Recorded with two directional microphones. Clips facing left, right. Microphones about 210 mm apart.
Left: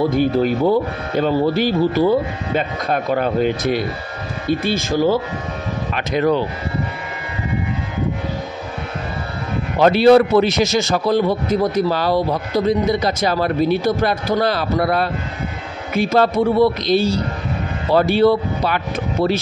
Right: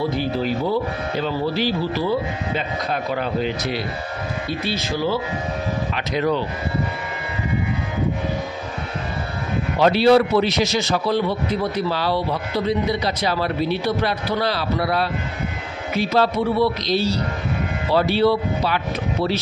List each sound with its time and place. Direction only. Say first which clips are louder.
0.1 s a man's voice: left 6 dB; 50° left (ahead or behind)
9.8 s a man's voice: left 4 dB; 50° left (ahead or behind)